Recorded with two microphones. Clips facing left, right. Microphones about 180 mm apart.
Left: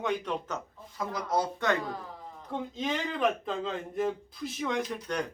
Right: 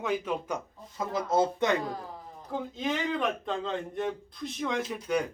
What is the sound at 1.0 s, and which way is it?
Speech, 25° right (ahead or behind).